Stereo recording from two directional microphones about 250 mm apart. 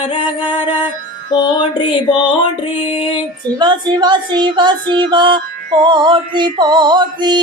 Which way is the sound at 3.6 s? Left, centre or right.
Centre.